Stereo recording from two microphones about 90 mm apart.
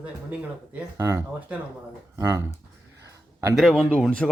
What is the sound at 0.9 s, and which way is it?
Speech, 30° right (ahead or behind).